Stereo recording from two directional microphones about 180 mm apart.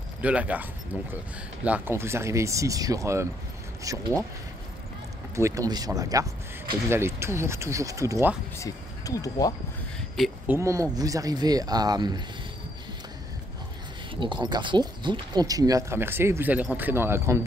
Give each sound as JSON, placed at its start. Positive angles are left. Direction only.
{"t": 0.2, "sound": "speech", "side_deg": -5}
{"t": 5.3, "sound": "speech", "side_deg": -15}
{"t": 8.5, "sound": "speech", "side_deg": 20}
{"t": 10.1, "sound": "speech", "side_deg": 0}
{"t": 10.5, "sound": "speech", "side_deg": -15}
{"t": 14.2, "sound": "speech", "side_deg": -25}